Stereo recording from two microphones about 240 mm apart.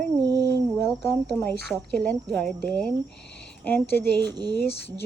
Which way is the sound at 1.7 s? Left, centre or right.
Centre.